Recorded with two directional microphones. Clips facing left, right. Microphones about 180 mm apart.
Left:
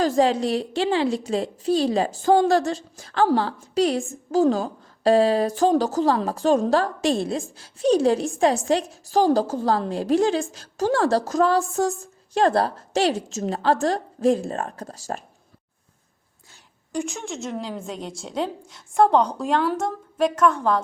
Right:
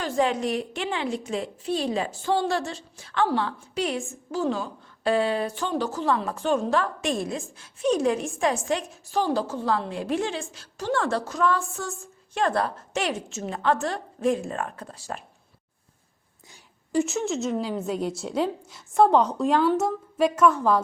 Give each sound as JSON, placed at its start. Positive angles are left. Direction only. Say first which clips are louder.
{"t": 0.0, "sound": "a woman's voice", "louder": "left 5 dB", "side_deg": 35}
{"t": 16.5, "sound": "a woman's voice", "louder": "right 4 dB", "side_deg": -5}